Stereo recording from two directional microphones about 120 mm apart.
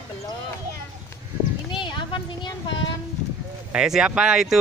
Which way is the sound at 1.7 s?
40° left (ahead or behind).